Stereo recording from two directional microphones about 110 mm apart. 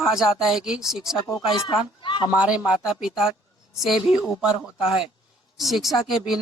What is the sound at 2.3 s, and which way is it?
Speech, 10° right (ahead or behind).